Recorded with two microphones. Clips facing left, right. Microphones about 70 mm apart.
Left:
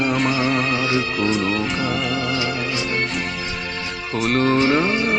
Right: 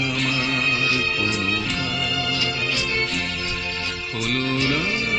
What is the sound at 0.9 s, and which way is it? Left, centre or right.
Music, left.